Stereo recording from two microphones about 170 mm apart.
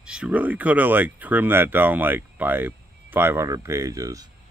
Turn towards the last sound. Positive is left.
turn(degrees=-20)  # may be behind; listen again after turning